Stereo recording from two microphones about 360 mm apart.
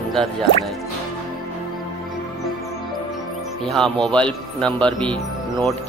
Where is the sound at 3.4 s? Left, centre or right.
Centre.